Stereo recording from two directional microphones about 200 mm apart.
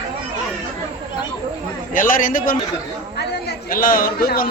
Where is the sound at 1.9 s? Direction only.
45° left (ahead or behind).